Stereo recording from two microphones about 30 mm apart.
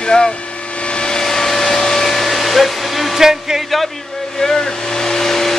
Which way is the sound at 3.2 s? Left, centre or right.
Centre.